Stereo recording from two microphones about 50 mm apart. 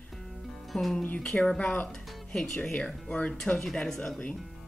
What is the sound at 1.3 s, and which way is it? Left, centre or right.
Speech, centre.